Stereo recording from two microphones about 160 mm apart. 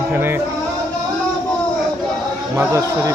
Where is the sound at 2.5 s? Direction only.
20° right (ahead or behind).